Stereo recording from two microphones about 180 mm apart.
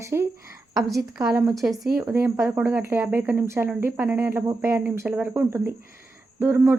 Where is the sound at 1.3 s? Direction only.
10° right (ahead or behind).